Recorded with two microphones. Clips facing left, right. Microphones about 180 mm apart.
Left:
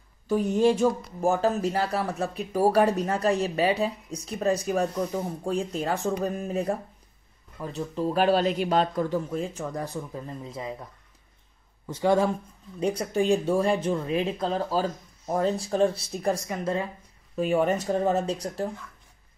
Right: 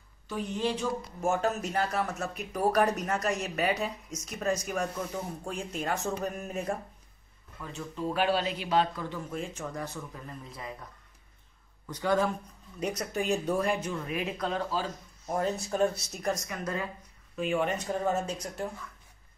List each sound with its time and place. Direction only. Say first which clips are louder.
0.3 s speech: left 10 dB; 45° left (ahead or behind); by 10.8 s 25° left (ahead or behind)
11.8 s speech: left 5 dB; 25° left (ahead or behind)
17.4 s speech: left 6 dB; 40° left (ahead or behind)